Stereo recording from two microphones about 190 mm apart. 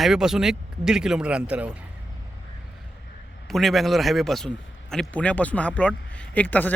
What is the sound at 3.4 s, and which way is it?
A man's voice, centre (ahead or behind).